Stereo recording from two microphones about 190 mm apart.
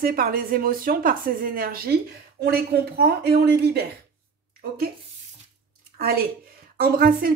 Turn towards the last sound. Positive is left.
turn(degrees=-50)  # may be behind; listen again after turning